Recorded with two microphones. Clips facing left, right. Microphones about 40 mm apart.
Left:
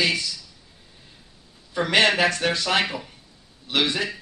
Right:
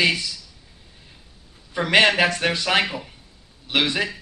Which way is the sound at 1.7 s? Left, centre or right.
Right.